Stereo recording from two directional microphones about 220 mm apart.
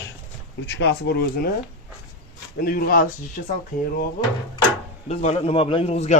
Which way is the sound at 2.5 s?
40° left (ahead or behind).